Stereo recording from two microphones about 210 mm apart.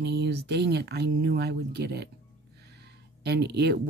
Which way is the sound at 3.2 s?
50° right (ahead or behind).